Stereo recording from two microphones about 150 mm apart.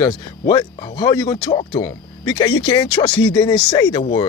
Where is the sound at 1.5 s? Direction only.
40° left (ahead or behind).